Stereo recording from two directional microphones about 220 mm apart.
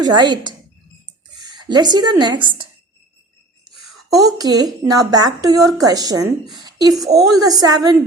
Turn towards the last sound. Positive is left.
turn(degrees=-15)  # may be behind; listen again after turning